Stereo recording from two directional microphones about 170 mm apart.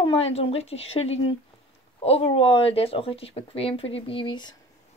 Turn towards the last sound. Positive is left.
turn(degrees=25)  # may be behind; listen again after turning